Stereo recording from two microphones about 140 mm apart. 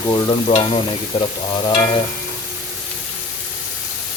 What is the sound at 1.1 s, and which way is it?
Stir, 45° left (ahead or behind).